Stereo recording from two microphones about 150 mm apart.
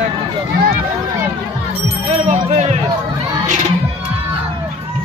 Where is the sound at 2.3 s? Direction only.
45° right (ahead or behind).